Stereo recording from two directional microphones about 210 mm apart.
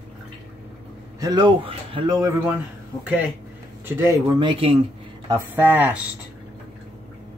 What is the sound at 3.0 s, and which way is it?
Speech, 10° right (ahead or behind).